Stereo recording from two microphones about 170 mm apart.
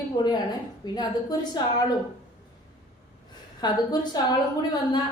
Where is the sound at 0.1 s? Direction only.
25° left (ahead or behind).